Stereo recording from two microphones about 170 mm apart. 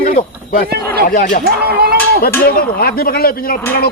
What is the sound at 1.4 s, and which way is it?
Speech, 65° right (ahead or behind).